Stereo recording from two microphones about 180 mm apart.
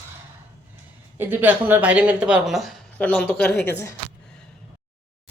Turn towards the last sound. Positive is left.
turn(degrees=10)  # may be behind; listen again after turning